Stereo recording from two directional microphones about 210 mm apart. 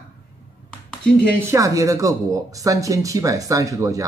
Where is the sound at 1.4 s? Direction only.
15° right (ahead or behind).